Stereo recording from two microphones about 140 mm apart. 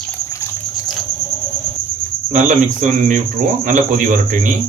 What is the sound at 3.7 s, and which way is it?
Speech, 70° right (ahead or behind).